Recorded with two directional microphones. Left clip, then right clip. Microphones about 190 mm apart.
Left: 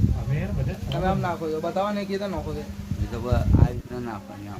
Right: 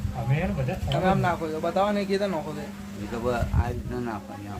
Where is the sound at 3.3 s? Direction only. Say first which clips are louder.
Left 1 dB; 20° left (ahead or behind).